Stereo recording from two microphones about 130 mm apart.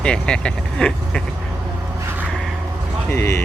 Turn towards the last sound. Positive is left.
turn(degrees=20)  # may be behind; listen again after turning